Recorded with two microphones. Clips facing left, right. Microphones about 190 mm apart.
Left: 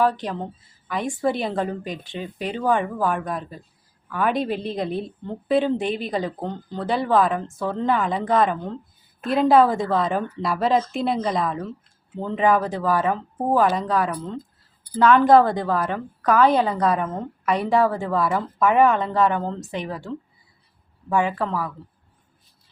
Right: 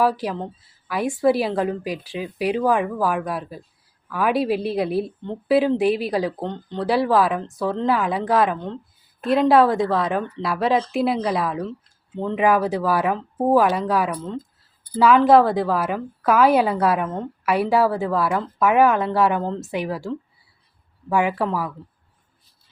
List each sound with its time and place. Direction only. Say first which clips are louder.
0.0 s a woman's voice: right 1 dB; 5° right (ahead or behind)